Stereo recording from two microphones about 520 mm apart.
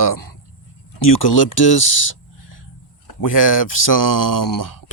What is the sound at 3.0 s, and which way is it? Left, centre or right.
Speech, left.